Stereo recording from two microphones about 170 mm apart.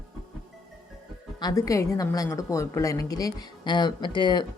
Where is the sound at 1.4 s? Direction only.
20° left (ahead or behind).